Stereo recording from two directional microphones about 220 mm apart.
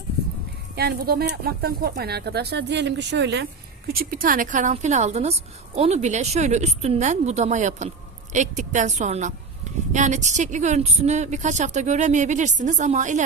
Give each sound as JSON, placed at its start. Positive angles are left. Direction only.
{"t": 0.8, "sound": "speech", "side_deg": -45}
{"t": 3.8, "sound": "a woman's voice", "side_deg": -40}